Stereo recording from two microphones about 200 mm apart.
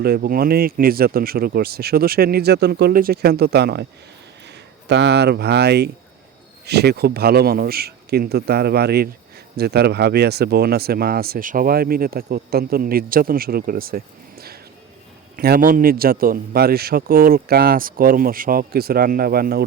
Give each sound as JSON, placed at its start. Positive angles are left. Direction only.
{"t": 0.0, "sound": "speech", "side_deg": -50}